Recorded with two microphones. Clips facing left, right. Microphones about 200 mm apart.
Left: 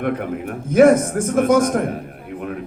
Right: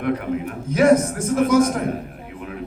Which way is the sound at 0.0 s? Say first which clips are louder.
Even; 50° left (ahead or behind).